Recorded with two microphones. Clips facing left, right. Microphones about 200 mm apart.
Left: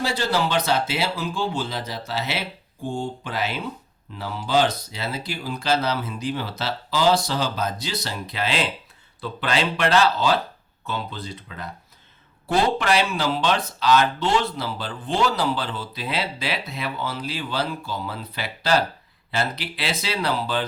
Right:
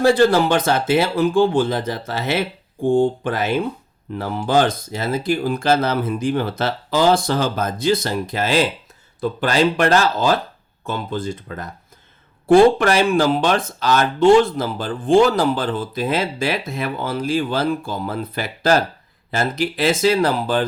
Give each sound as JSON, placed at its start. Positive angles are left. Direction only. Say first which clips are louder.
{"t": 0.0, "sound": "speech", "louder": "right 10 dB", "side_deg": -50}